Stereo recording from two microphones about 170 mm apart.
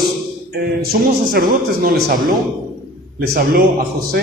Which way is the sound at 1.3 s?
60° right (ahead or behind).